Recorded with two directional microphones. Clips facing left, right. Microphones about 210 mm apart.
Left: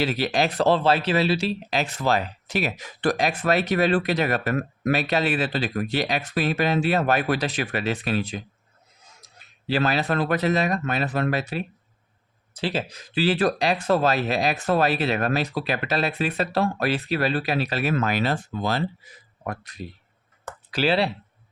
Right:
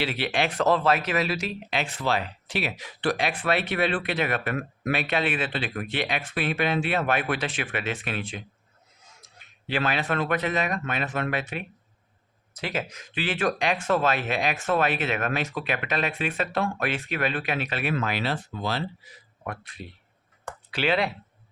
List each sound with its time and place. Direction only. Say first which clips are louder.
0.0 s speech: left 4 dB; 40° left (ahead or behind)